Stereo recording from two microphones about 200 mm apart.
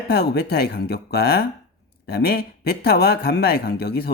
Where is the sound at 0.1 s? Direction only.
50° left (ahead or behind).